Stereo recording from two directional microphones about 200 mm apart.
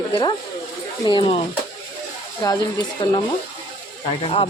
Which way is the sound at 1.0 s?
25° left (ahead or behind).